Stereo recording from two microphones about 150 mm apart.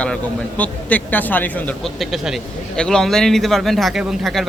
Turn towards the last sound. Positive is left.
turn(degrees=0)  # may be behind; listen again after turning